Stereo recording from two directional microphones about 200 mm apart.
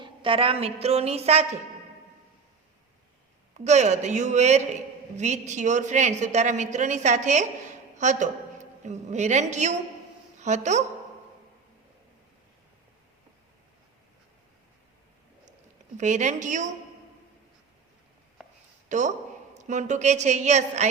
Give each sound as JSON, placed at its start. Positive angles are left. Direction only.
{"t": 0.0, "sound": "a man's voice", "side_deg": -25}
{"t": 3.6, "sound": "a man's voice", "side_deg": -35}
{"t": 16.0, "sound": "a man's voice", "side_deg": -35}
{"t": 18.9, "sound": "a man's voice", "side_deg": -35}